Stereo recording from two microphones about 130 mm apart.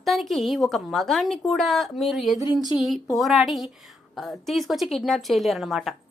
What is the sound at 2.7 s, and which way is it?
A woman's voice, centre (ahead or behind).